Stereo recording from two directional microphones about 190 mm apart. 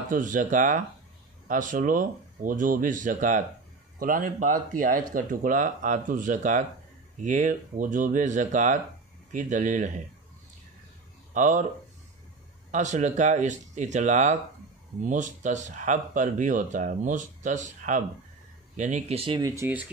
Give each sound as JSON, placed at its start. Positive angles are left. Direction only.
{"t": 0.1, "sound": "speech", "side_deg": -45}
{"t": 11.3, "sound": "speech", "side_deg": -40}
{"t": 12.7, "sound": "speech", "side_deg": -40}
{"t": 19.4, "sound": "speech", "side_deg": -15}